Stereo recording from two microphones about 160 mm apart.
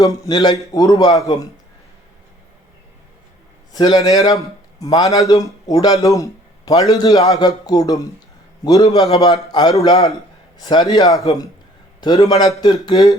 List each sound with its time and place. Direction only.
0.0 s a man's voice: 25° left (ahead or behind)
3.7 s a man's voice: 25° left (ahead or behind)